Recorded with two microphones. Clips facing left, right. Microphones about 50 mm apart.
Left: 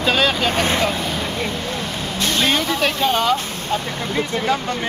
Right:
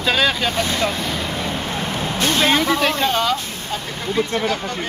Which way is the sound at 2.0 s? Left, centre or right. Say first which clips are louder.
Right 2 dB; right.